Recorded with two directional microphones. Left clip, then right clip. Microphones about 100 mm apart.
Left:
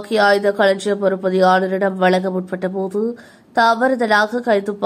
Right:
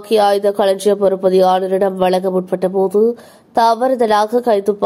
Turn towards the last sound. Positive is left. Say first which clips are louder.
# right 3 dB
turn(degrees=-35)  # may be behind; listen again after turning